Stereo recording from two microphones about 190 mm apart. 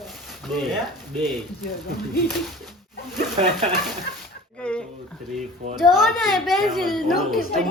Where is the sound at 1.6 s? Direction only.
55° left (ahead or behind).